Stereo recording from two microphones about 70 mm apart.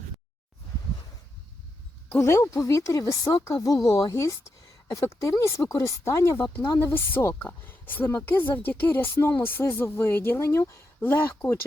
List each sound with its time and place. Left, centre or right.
2.1 s a woman's voice: left
2.4 s a woman's voice: left
7.3 s a woman's voice: left